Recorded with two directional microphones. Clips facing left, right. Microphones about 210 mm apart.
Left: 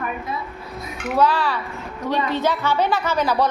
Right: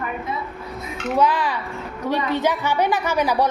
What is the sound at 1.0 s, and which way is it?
A woman's voice, 15° right (ahead or behind).